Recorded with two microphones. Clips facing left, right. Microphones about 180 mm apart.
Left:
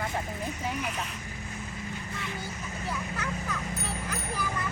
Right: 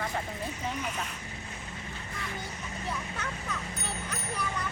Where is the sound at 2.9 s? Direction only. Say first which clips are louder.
Left 3 dB; centre (ahead or behind).